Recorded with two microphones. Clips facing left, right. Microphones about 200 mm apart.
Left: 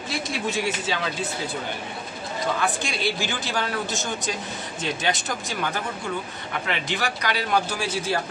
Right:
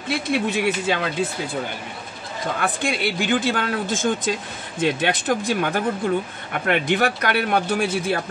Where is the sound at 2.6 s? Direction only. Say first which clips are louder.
Right 3 dB; 55° right (ahead or behind).